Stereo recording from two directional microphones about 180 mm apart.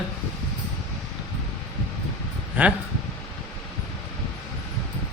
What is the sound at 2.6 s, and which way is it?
Speech, 10° right (ahead or behind).